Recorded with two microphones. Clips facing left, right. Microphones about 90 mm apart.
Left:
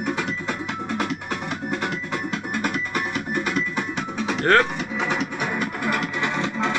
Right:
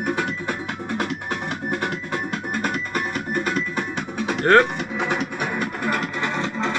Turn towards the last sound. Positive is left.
turn(degrees=-40)  # may be behind; listen again after turning